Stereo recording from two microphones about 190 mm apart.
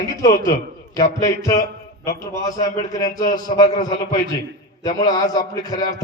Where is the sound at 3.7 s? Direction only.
40° left (ahead or behind).